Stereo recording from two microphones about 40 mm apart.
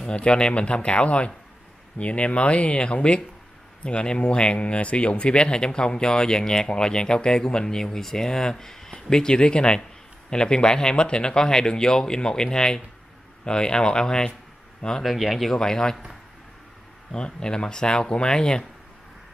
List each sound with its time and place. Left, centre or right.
0.0 s speech: left
15.0 s speech: centre
15.5 s speech: centre
17.1 s speech: left